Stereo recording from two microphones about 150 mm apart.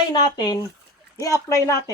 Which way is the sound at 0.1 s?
30° left (ahead or behind).